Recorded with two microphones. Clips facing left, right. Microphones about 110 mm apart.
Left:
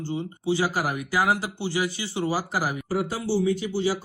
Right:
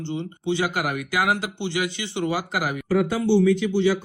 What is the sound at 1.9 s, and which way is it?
Speech, 20° right (ahead or behind).